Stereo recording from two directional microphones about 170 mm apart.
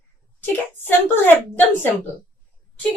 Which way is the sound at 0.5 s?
10° left (ahead or behind).